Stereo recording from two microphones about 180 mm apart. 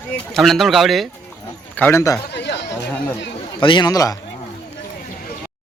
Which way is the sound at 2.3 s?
70° left (ahead or behind).